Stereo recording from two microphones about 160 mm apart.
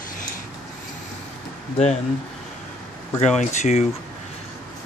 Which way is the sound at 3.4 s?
45° left (ahead or behind).